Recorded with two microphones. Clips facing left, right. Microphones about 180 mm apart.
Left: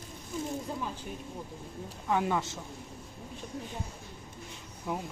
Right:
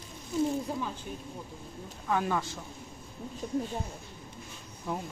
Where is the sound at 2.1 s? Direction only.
20° left (ahead or behind).